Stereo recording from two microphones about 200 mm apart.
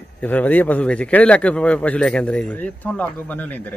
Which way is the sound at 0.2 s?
10° left (ahead or behind).